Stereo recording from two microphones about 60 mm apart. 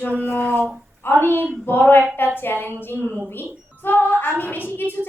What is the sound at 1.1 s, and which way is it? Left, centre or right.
A woman's voice, left.